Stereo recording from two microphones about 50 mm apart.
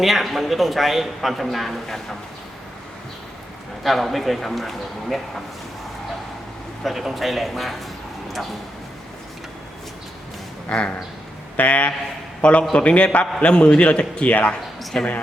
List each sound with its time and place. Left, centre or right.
0.0 s a man's voice: centre
3.8 s a man's voice: centre
6.8 s a man's voice: centre
10.7 s a man's voice: left
14.9 s speech: centre